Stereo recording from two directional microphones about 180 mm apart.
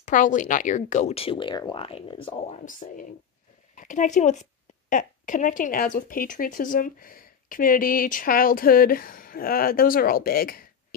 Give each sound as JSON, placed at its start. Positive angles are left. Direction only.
{"t": 0.0, "sound": "a woman's voice", "side_deg": 45}